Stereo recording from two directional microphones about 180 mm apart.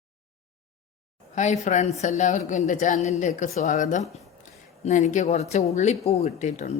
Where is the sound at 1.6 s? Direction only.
40° left (ahead or behind).